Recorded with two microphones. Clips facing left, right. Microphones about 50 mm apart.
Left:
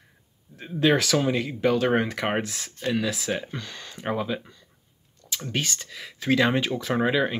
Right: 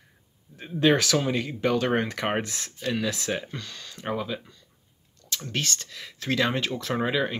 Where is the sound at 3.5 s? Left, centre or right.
Centre.